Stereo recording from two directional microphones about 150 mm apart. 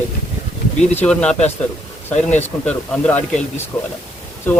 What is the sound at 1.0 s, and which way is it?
Speech, 5° left (ahead or behind).